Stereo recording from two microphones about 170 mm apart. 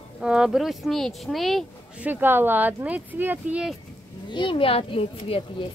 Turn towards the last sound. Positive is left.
turn(degrees=30)  # may be behind; listen again after turning